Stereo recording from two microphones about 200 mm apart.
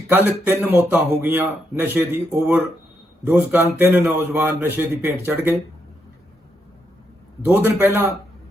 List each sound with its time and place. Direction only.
0.1 s a man's voice: 10° right (ahead or behind)
7.4 s a man's voice: 10° right (ahead or behind)